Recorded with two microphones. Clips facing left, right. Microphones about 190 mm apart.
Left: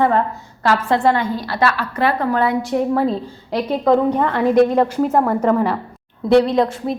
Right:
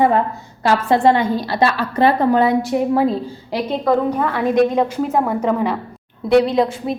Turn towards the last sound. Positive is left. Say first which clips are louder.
# even
turn(degrees=0)  # may be behind; listen again after turning